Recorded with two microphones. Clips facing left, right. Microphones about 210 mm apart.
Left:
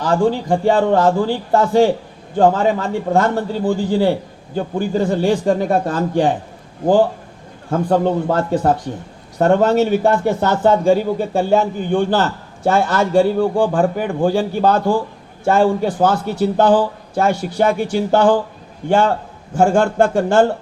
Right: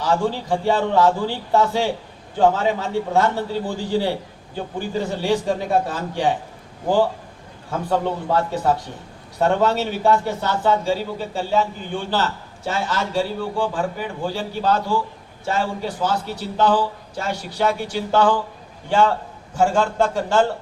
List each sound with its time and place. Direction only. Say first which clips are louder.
0.0 s a man's voice: left 5 dB; 50° left (ahead or behind)
7.7 s a man's voice: left 6 dB; 50° left (ahead or behind)